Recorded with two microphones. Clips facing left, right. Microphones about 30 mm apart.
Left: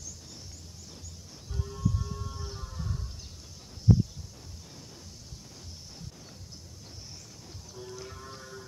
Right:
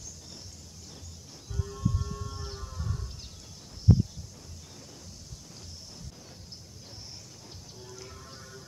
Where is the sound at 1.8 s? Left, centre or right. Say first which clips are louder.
Left 1 dB; centre.